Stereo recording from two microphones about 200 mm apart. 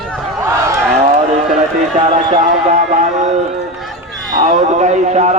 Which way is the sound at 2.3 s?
40° right (ahead or behind).